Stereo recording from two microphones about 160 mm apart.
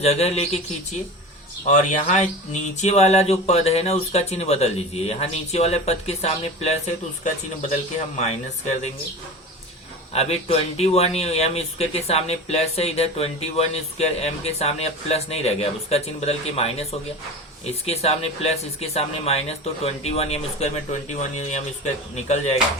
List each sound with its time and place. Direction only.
0.0 s a man's voice: 40° left (ahead or behind)
1.6 s a man's voice: 45° left (ahead or behind)
10.1 s a man's voice: 40° left (ahead or behind)